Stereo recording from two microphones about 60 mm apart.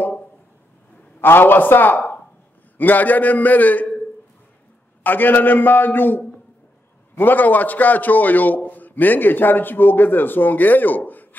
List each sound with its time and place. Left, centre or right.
1.2 s a man's voice: left
5.0 s a man's voice: left